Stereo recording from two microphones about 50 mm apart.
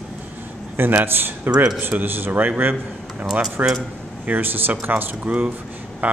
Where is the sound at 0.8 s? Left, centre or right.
Right.